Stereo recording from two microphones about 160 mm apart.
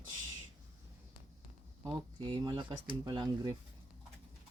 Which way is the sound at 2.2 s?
30° right (ahead or behind).